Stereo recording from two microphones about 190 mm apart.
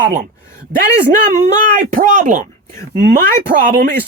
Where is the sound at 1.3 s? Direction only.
45° right (ahead or behind).